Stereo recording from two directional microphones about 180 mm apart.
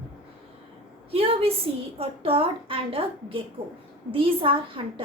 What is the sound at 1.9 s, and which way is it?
A woman's voice, 30° right (ahead or behind).